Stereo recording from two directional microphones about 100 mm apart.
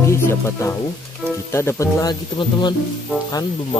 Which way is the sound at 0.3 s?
25° left (ahead or behind).